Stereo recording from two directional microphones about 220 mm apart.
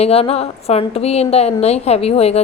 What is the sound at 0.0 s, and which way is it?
A woman's voice, 25° left (ahead or behind).